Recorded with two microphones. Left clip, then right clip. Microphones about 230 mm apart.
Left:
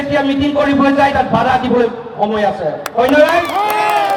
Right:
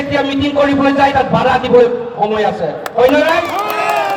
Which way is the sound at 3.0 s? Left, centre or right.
Left.